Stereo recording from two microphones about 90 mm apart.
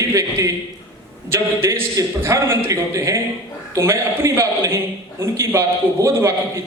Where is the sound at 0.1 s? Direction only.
35° right (ahead or behind).